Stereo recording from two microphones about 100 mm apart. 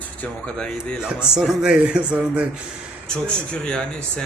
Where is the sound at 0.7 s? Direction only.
5° right (ahead or behind).